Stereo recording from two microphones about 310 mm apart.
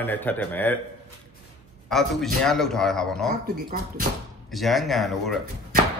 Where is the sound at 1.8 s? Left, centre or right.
Centre.